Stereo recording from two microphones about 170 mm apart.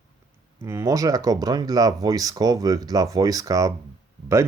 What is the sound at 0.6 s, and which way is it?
Speech, 15° right (ahead or behind).